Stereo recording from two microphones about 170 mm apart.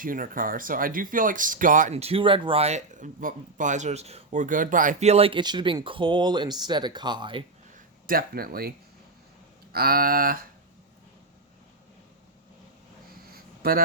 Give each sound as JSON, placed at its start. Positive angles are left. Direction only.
{"t": 0.0, "sound": "speech", "side_deg": -55}
{"t": 8.0, "sound": "speech", "side_deg": -60}
{"t": 9.7, "sound": "speech", "side_deg": -60}
{"t": 13.3, "sound": "a sound", "side_deg": -60}